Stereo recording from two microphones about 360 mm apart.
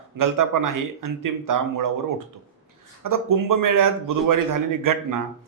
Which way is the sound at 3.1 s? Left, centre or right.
Right.